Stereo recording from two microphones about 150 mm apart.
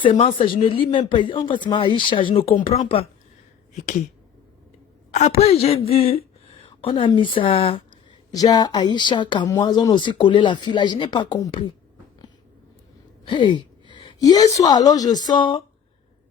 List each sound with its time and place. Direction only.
0.0 s speech: 40° left (ahead or behind)
5.4 s a woman's voice: 45° left (ahead or behind)
8.3 s speech: 25° left (ahead or behind)
13.2 s a woman's voice: 30° left (ahead or behind)